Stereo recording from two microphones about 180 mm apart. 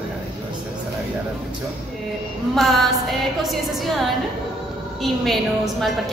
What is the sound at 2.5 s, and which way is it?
A woman's voice, centre (ahead or behind).